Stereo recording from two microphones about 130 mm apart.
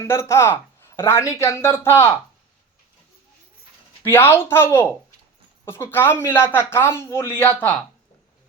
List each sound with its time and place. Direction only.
0.0 s speech: 20° left (ahead or behind)
4.0 s speech: 15° left (ahead or behind)